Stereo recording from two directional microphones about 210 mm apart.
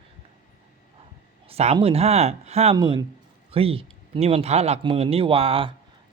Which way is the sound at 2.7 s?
20° right (ahead or behind).